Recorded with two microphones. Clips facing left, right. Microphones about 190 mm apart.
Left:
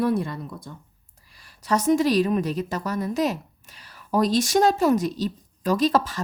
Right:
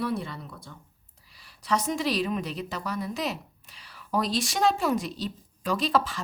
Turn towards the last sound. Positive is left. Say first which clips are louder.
# left 5 dB
turn(degrees=40)  # may be behind; listen again after turning